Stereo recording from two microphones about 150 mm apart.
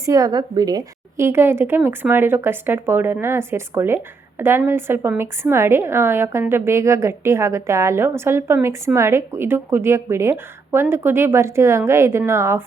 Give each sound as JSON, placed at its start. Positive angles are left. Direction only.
{"t": 0.0, "sound": "a woman's voice", "side_deg": -25}